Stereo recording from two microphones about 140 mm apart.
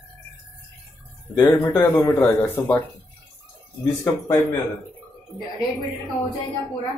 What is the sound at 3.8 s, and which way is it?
Speech, 25° left (ahead or behind).